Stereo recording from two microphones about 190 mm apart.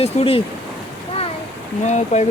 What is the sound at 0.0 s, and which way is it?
Speech, 30° left (ahead or behind).